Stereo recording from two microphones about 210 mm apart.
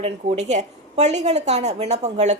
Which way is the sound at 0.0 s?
30° right (ahead or behind).